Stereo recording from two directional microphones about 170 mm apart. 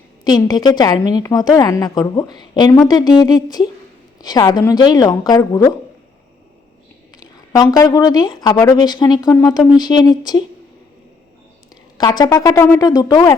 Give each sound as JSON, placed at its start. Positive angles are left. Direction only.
{"t": 0.3, "sound": "a woman's voice", "side_deg": 25}
{"t": 7.2, "sound": "a woman's voice", "side_deg": 20}
{"t": 11.9, "sound": "a woman's voice", "side_deg": 25}